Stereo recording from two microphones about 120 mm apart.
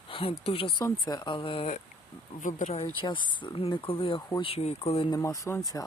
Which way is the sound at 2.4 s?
90° left.